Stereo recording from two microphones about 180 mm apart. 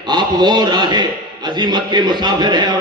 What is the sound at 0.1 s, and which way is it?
A man's voice, 25° right (ahead or behind).